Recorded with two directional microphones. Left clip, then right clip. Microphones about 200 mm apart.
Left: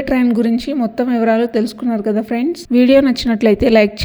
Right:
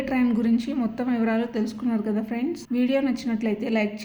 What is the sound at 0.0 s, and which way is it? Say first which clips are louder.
A woman's voice: left 9 dB; 35° left (ahead or behind).